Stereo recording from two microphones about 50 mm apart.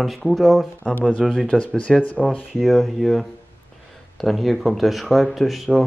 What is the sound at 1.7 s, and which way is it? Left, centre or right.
Speech, centre.